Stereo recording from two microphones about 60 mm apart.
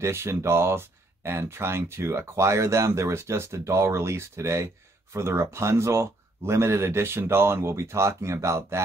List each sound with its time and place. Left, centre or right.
0.0 s speech: right